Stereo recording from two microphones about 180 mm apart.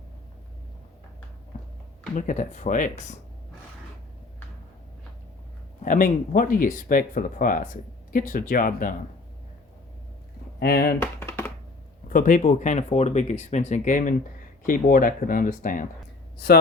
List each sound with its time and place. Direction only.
2.1 s speech: 45° left (ahead or behind)
5.8 s speech: 50° left (ahead or behind)
10.6 s speech: 60° left (ahead or behind)
11.0 s computer keyboard: 10° left (ahead or behind)
12.0 s speech: 50° left (ahead or behind)